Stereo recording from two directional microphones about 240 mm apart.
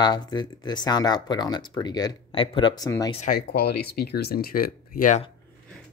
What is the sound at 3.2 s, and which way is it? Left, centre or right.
Speech, left.